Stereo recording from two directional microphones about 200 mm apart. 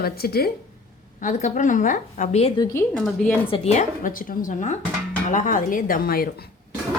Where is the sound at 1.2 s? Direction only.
40° left (ahead or behind).